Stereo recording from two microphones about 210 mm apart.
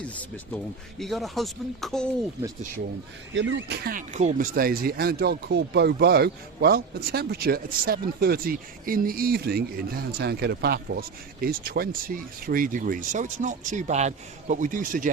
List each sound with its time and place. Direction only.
0.2 s speech: 5° left (ahead or behind)
3.3 s speech: 55° right (ahead or behind); by 15.1 s 40° right (ahead or behind)